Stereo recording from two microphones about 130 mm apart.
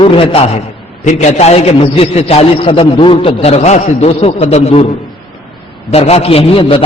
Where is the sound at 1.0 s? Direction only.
65° left (ahead or behind).